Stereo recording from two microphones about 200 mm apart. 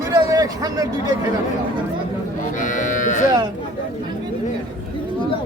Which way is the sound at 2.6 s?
40° left (ahead or behind).